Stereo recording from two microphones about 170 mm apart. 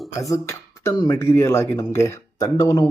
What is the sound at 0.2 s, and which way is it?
Speech, 20° left (ahead or behind).